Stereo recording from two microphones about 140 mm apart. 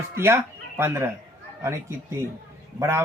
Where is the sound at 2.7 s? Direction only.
20° right (ahead or behind).